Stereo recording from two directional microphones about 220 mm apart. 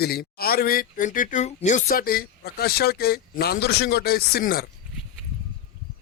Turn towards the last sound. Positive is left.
turn(degrees=45)  # may be behind; listen again after turning